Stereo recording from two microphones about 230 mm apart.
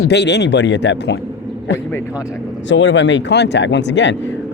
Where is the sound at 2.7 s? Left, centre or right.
Left.